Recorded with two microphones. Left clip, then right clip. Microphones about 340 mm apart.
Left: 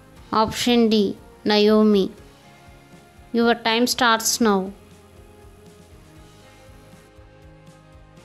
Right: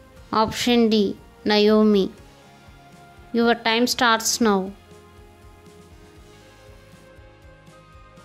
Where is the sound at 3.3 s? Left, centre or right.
Left.